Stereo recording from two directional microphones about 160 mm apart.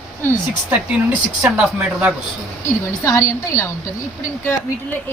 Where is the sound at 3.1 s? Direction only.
20° left (ahead or behind).